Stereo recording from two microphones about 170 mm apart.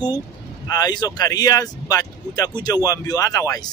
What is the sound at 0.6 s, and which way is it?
Speech, 20° left (ahead or behind).